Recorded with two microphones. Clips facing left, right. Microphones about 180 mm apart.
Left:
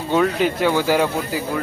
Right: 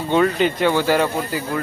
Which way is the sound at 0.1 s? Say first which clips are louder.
Right 1 dB; 5° left (ahead or behind).